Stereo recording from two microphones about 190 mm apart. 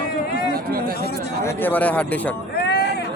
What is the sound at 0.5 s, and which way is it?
Speech, 50° right (ahead or behind).